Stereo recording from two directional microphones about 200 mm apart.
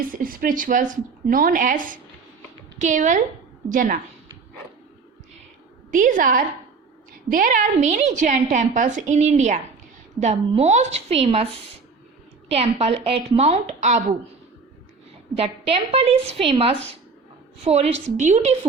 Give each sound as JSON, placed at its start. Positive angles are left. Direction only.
{"t": 0.1, "sound": "a woman's voice", "side_deg": -45}
{"t": 5.9, "sound": "a woman's voice", "side_deg": -40}
{"t": 12.5, "sound": "a woman's voice", "side_deg": -30}
{"t": 15.4, "sound": "a woman's voice", "side_deg": -30}